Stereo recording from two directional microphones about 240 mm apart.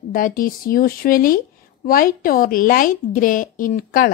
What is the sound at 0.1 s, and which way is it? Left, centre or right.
A woman's voice, left.